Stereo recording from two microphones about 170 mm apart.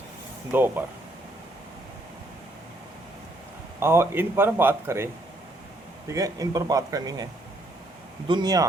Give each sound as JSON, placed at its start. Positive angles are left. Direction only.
{"t": 0.5, "sound": "speech", "side_deg": -10}
{"t": 3.8, "sound": "speech", "side_deg": -15}
{"t": 6.1, "sound": "speech", "side_deg": -20}
{"t": 8.3, "sound": "speech", "side_deg": -25}